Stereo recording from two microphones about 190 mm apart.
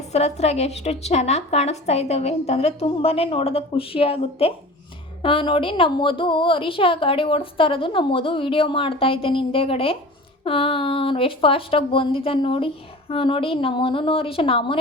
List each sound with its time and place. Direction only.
0.1 s a woman's voice: 35° left (ahead or behind)